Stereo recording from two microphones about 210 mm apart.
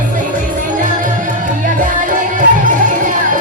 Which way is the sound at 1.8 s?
40° right (ahead or behind).